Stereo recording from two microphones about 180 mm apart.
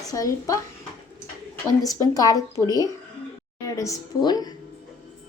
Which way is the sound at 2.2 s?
20° left (ahead or behind).